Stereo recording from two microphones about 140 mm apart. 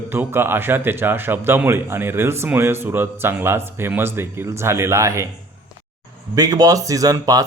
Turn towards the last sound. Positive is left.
turn(degrees=-25)  # may be behind; listen again after turning